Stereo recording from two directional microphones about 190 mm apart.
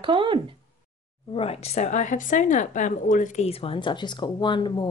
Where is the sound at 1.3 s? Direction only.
30° left (ahead or behind).